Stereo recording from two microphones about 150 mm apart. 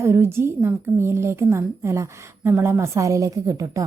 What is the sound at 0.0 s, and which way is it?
A woman's voice, 15° right (ahead or behind).